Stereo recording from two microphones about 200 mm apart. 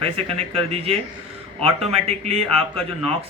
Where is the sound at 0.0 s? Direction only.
30° right (ahead or behind).